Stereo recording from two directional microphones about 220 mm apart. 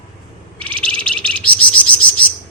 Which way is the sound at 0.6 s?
5° left (ahead or behind).